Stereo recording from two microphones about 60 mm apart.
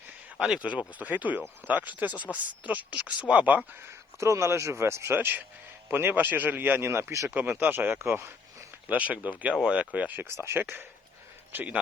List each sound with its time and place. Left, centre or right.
0.3 s speech: centre
4.2 s speech: right
7.3 s speech: right
7.9 s speech: right
8.9 s speech: right
10.2 s speech: right